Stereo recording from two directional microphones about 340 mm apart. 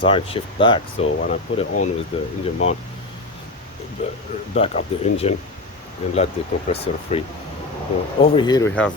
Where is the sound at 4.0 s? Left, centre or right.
Centre.